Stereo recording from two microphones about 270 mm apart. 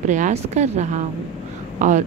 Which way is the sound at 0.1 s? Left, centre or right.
Right.